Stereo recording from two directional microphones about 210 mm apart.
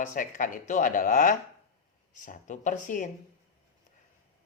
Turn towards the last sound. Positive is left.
turn(degrees=35)  # may be behind; listen again after turning